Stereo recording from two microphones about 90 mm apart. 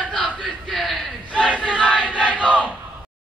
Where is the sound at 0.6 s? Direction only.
Centre (ahead or behind).